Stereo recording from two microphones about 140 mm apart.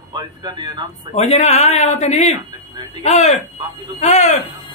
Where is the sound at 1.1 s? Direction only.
50° left (ahead or behind).